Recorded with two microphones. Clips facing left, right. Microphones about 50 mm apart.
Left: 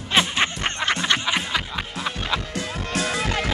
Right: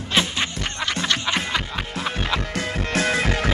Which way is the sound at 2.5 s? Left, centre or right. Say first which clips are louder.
Right 3 dB; right.